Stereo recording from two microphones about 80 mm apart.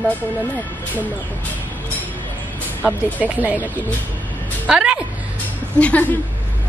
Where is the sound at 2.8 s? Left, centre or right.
Centre.